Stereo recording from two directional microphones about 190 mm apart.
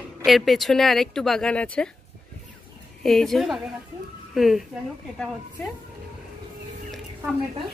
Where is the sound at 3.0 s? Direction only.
Centre (ahead or behind).